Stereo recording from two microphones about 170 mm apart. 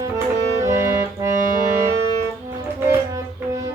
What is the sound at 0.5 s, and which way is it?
Clarinet, 15° right (ahead or behind).